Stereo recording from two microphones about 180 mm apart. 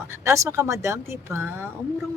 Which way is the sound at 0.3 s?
15° right (ahead or behind).